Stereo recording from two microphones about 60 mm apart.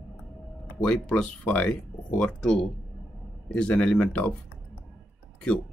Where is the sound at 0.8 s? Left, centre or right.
Centre.